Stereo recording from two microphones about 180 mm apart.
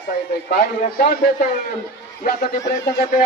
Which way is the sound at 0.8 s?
50° left (ahead or behind).